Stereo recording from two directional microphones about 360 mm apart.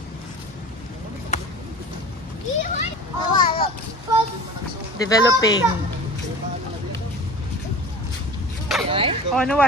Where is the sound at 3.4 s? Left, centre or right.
Centre.